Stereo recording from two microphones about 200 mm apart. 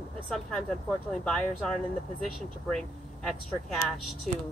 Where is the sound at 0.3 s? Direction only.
Centre (ahead or behind).